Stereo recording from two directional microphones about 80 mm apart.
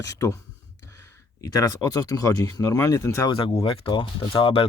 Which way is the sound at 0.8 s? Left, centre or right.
Left.